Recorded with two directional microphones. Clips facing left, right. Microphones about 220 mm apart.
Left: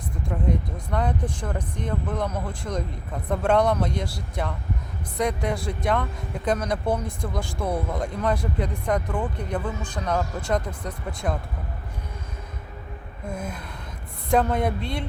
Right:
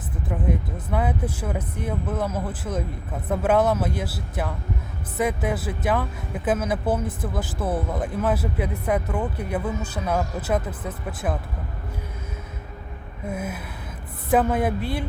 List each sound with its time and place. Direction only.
0.3 s speech: 5° right (ahead or behind)
13.2 s gasp: 5° right (ahead or behind)
14.3 s speech: 5° right (ahead or behind)